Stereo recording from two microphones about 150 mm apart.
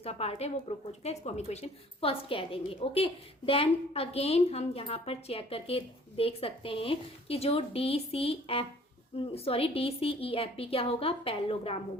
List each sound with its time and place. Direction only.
0.0 s a woman's voice: 40° left (ahead or behind)